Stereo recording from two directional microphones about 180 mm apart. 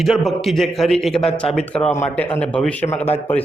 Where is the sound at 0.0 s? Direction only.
Centre (ahead or behind).